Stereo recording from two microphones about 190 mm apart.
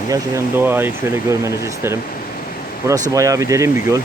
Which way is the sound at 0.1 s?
10° right (ahead or behind).